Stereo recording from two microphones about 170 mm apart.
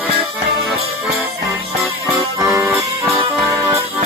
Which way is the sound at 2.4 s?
20° right (ahead or behind).